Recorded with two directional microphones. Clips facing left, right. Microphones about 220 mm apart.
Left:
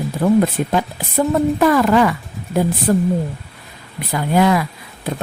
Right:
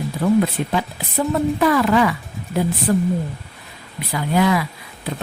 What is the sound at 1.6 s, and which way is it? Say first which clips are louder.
Speech: left 2 dB; 45° left (ahead or behind).